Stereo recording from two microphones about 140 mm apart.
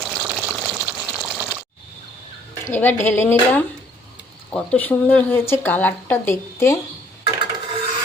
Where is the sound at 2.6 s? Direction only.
15° left (ahead or behind).